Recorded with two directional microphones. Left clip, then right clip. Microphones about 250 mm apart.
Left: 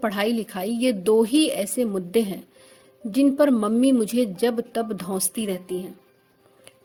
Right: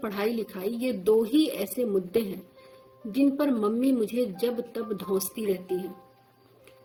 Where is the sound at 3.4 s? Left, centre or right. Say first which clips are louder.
Left 7 dB; left.